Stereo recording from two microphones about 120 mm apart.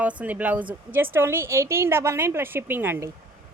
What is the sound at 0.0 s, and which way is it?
Speech, 10° right (ahead or behind).